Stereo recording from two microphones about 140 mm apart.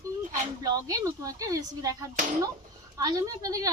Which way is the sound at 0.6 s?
25° right (ahead or behind).